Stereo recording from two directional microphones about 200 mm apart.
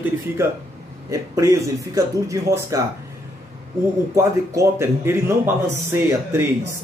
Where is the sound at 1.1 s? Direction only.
15° right (ahead or behind).